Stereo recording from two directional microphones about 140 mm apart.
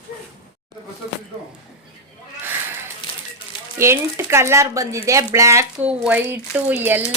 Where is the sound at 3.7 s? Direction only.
20° right (ahead or behind).